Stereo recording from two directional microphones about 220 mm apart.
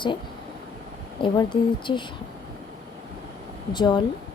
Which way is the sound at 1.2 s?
20° left (ahead or behind).